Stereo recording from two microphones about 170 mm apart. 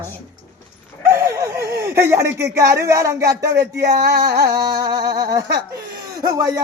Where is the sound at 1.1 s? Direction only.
15° right (ahead or behind).